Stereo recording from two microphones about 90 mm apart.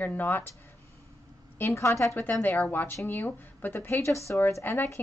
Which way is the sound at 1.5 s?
30° left (ahead or behind).